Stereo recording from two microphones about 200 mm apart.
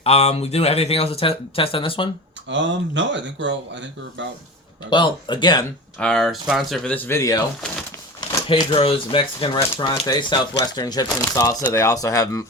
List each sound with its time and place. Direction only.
0.0 s speech: 30° left (ahead or behind)
2.5 s speech: 65° right (ahead or behind)
4.9 s speech: 25° left (ahead or behind)
6.0 s speech: 5° left (ahead or behind)
8.4 s speech: 25° left (ahead or behind)